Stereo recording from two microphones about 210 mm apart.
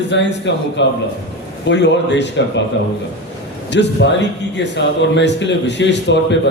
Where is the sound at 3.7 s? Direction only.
55° left (ahead or behind).